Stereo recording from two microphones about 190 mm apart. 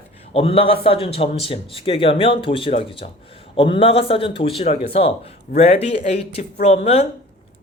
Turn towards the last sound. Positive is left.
turn(degrees=35)  # may be behind; listen again after turning